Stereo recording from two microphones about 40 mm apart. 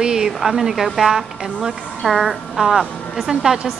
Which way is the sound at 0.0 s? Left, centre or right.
Centre.